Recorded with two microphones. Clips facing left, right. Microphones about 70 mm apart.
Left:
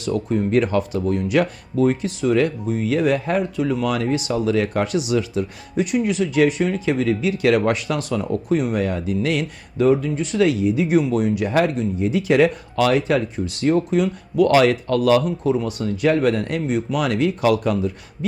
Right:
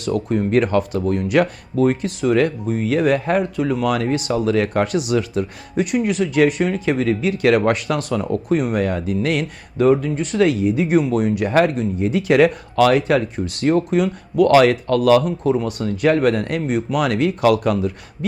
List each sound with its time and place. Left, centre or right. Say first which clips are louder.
0.0 s speech: right 1 dB; right